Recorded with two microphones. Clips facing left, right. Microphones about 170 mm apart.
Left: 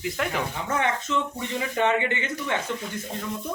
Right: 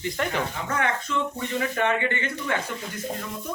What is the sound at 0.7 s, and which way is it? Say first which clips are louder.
Speech: left 2 dB; 20° left (ahead or behind).